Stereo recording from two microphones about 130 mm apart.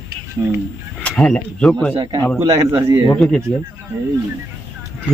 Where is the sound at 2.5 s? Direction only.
25° right (ahead or behind).